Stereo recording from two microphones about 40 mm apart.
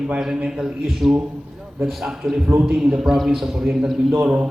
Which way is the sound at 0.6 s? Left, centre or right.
Centre.